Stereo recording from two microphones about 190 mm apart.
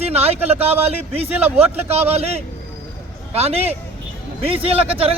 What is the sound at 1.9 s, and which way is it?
A man's voice, 35° right (ahead or behind).